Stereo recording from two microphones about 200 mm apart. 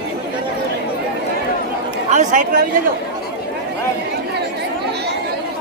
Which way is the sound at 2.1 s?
40° right (ahead or behind).